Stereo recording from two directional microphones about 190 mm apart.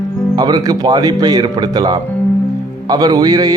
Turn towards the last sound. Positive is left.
turn(degrees=-20)  # may be behind; listen again after turning